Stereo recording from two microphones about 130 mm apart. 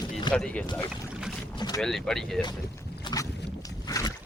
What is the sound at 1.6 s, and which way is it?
Boat, 35° left (ahead or behind).